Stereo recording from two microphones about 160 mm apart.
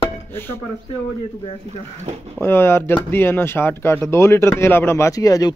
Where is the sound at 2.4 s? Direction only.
15° left (ahead or behind).